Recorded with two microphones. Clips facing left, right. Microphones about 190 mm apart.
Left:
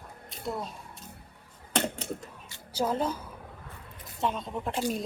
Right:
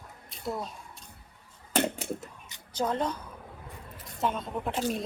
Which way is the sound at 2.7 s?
5° left (ahead or behind).